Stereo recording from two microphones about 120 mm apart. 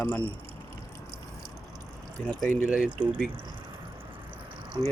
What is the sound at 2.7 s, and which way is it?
Speech, 10° right (ahead or behind).